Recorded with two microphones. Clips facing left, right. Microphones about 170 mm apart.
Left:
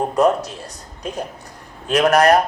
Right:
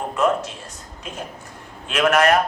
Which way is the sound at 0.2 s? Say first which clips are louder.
Left 4 dB; 35° left (ahead or behind).